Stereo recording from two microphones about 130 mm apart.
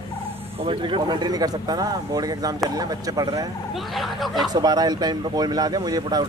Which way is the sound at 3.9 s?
Centre (ahead or behind).